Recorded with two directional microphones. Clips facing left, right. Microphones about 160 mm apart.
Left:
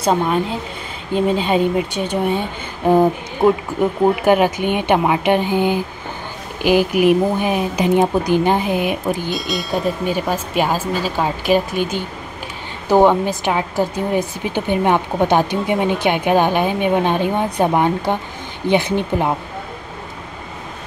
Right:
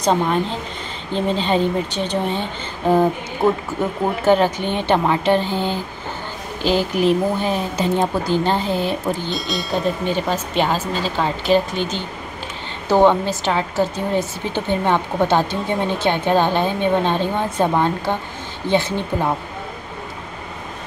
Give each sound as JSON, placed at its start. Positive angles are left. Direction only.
{"t": 0.0, "sound": "a woman's voice", "side_deg": 5}
{"t": 9.3, "sound": "a woman's voice", "side_deg": 0}